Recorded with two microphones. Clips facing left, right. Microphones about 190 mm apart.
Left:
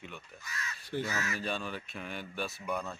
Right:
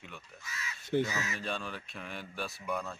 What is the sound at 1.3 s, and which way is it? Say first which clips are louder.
Speech: left 2 dB; centre (ahead or behind).